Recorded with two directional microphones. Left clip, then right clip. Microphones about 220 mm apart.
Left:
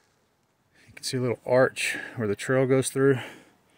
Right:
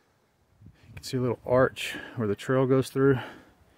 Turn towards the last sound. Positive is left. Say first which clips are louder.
# left 1 dB
turn(degrees=-15)  # may be behind; listen again after turning